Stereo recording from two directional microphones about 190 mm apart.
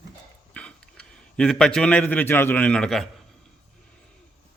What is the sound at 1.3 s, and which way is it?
A man's voice, 5° left (ahead or behind).